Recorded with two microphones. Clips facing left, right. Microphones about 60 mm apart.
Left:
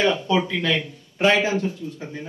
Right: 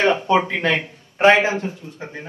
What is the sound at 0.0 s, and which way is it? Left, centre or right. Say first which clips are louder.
Speech: right 3 dB; right.